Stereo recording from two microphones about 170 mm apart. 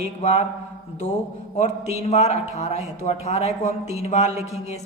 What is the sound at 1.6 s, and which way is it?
A man's voice, 40° left (ahead or behind).